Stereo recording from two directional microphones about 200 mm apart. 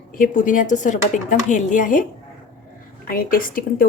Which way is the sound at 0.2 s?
40° left (ahead or behind).